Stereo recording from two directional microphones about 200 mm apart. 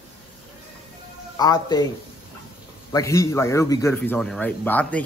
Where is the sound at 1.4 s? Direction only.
20° left (ahead or behind).